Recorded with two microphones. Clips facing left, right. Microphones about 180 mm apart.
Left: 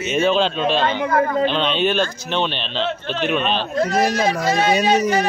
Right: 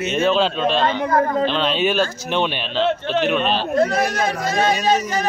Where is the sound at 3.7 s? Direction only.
55° right (ahead or behind).